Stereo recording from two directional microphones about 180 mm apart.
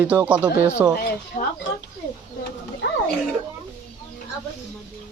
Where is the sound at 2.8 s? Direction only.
90° left.